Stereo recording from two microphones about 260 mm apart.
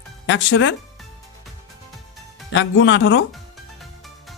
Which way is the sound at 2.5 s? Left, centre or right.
Left.